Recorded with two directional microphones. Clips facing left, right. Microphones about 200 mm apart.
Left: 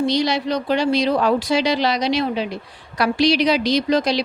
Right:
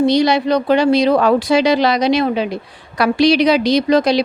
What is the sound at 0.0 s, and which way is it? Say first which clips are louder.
A woman's voice: right 6 dB; 55° right (ahead or behind).